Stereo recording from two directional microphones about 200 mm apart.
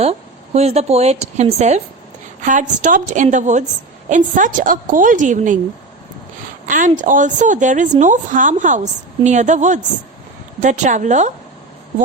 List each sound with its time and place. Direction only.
0.0 s a woman's voice: 30° right (ahead or behind)
6.7 s a woman's voice: 40° right (ahead or behind)